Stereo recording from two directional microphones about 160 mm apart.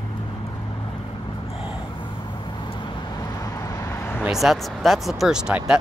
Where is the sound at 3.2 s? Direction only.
20° left (ahead or behind).